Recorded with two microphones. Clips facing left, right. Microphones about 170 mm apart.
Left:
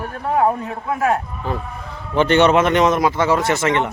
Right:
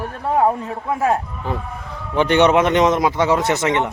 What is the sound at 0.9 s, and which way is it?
Speech, 25° right (ahead or behind).